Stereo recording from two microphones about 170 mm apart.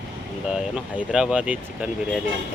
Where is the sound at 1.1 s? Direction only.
5° right (ahead or behind).